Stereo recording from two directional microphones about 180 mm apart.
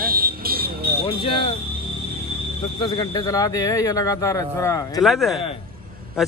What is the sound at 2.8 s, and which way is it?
Speech, 20° left (ahead or behind).